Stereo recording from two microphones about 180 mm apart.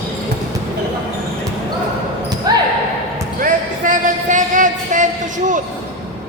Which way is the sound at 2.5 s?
20° right (ahead or behind).